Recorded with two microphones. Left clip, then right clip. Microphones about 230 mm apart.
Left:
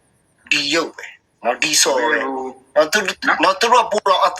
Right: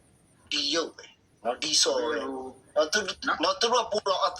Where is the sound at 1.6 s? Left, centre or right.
Left.